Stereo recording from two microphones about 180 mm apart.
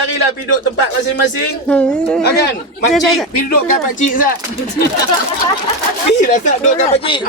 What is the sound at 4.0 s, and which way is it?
Speech, 50° left (ahead or behind).